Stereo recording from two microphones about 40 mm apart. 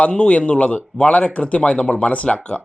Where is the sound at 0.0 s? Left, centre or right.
Left.